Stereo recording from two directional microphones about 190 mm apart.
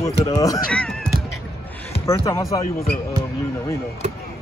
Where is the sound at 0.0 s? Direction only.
20° left (ahead or behind).